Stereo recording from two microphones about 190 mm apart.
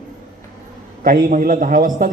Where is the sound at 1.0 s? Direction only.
45° right (ahead or behind).